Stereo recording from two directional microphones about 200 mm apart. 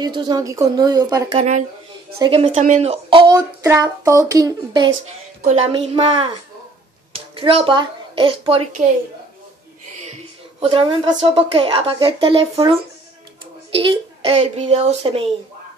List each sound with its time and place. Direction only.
0.0 s speech: 20° right (ahead or behind)
1.3 s a woman's voice: 35° right (ahead or behind)
2.1 s speech: 25° right (ahead or behind)
2.5 s speech: 40° right (ahead or behind); by 4.9 s 20° right (ahead or behind)
5.4 s a woman's voice: 35° right (ahead or behind)
7.3 s a woman's voice: 30° right (ahead or behind)
10.0 s a woman's voice: 30° right (ahead or behind)